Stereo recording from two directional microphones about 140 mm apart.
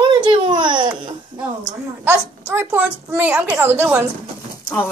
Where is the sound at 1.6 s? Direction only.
20° right (ahead or behind).